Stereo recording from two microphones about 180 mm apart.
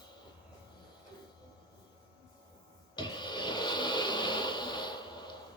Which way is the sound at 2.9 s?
25° left (ahead or behind).